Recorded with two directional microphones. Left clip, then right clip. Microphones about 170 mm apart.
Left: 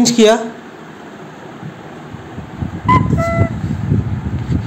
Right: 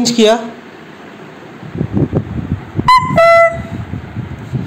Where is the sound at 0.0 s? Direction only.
Centre (ahead or behind).